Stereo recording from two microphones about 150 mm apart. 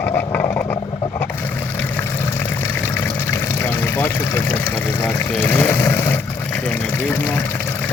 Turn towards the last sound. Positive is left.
turn(degrees=15)  # may be behind; listen again after turning